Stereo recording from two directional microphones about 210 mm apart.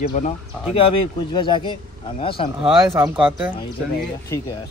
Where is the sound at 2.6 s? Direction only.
Centre (ahead or behind).